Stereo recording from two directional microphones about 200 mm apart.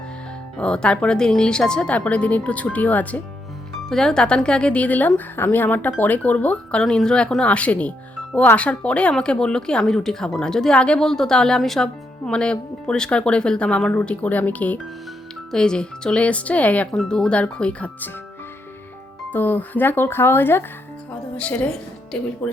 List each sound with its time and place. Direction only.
0.5 s speech: 5° left (ahead or behind)
19.3 s speech: 10° left (ahead or behind)